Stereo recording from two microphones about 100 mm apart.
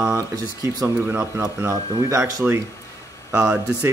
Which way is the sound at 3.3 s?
10° right (ahead or behind).